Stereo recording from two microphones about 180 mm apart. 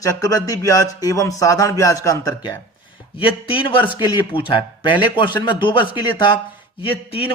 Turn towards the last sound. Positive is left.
turn(degrees=30)  # may be behind; listen again after turning